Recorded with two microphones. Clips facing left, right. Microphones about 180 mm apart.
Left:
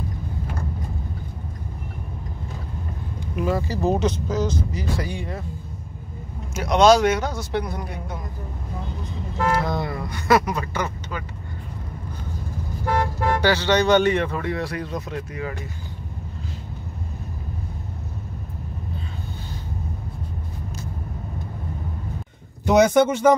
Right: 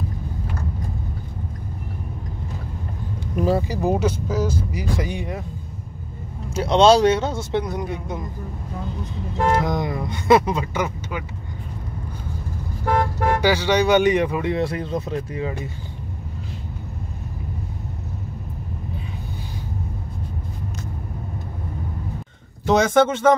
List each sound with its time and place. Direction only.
3.3 s vehicle: 35° right (ahead or behind)
3.6 s speech: 15° right (ahead or behind)
6.5 s speech: 30° right (ahead or behind)
9.5 s speech: 15° right (ahead or behind)
13.4 s speech: 10° right (ahead or behind); by 15.5 s 25° right (ahead or behind)
22.7 s speech: 10° left (ahead or behind)